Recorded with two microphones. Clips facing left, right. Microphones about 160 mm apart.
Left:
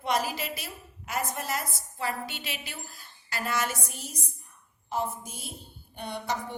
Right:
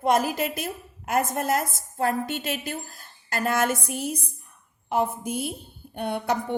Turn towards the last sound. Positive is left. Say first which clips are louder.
# right 7 dB
turn(degrees=-60)  # may be behind; listen again after turning